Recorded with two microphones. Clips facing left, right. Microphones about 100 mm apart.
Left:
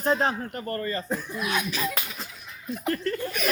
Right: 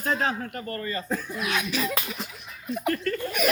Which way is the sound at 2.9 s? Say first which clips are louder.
Even; 25° left (ahead or behind).